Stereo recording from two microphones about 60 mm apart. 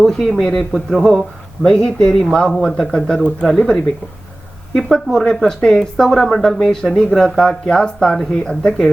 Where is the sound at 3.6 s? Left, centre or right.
Centre.